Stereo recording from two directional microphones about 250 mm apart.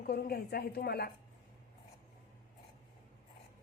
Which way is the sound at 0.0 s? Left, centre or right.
Left.